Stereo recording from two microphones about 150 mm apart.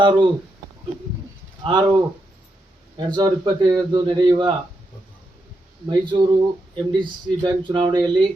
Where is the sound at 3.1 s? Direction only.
30° right (ahead or behind).